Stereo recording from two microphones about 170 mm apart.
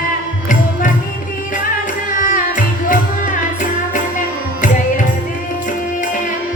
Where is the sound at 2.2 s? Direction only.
50° left (ahead or behind).